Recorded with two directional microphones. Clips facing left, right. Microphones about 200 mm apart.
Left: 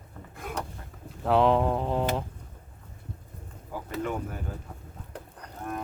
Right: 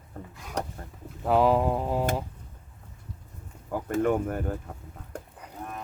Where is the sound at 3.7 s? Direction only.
50° right (ahead or behind).